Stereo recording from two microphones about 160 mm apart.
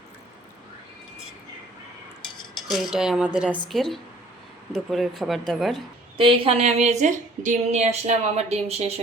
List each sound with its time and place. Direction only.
2.6 s speech: centre (ahead or behind)
6.1 s a woman's voice: 35° right (ahead or behind)